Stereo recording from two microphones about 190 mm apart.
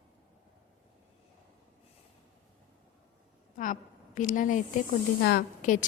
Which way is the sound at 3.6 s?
45° left (ahead or behind).